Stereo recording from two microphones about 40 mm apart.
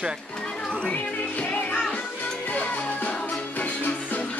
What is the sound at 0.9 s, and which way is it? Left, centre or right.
Speech, left.